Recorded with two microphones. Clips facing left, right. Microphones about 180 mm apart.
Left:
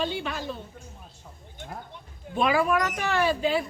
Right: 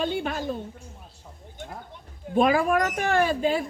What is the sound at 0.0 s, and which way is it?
Speech, 50° right (ahead or behind).